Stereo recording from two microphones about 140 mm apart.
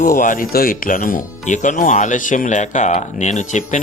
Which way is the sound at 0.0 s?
70° left (ahead or behind).